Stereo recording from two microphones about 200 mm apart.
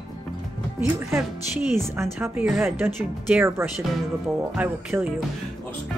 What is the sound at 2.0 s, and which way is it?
Speech, 10° right (ahead or behind).